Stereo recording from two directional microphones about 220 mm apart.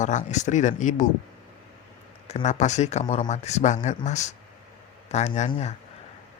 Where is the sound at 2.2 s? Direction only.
30° left (ahead or behind).